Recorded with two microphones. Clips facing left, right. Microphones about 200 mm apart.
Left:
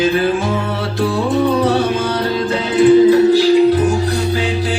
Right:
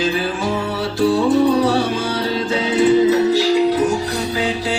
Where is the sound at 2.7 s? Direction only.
35° left (ahead or behind).